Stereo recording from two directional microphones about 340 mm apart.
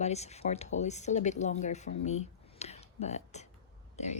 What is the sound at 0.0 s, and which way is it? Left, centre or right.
Speech, centre.